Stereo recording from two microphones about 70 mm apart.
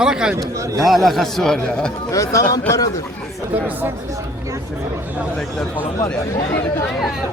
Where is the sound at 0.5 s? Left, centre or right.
Right.